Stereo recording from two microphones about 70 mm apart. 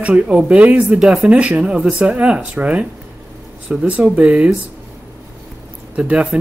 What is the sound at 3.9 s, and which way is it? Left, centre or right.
Speech, centre.